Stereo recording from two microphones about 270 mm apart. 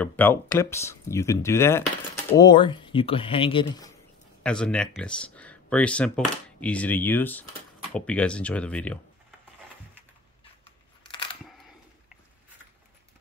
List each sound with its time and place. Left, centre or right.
0.0 s speech: centre
4.4 s speech: centre
10.6 s scissors: centre